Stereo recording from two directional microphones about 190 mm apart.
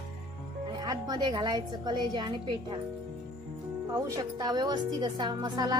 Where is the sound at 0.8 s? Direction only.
20° right (ahead or behind).